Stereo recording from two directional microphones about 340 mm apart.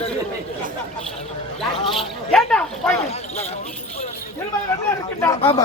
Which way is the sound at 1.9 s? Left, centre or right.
Centre.